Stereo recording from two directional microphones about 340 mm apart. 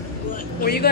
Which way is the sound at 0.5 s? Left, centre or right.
Left.